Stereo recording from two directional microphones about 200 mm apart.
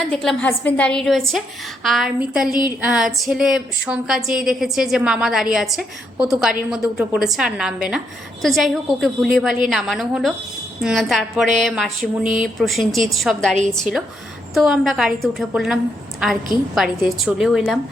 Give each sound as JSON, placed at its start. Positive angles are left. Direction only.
{"t": 0.1, "sound": "a woman's voice", "side_deg": 5}
{"t": 2.5, "sound": "a woman's voice", "side_deg": 20}
{"t": 2.8, "sound": "a woman's voice", "side_deg": 0}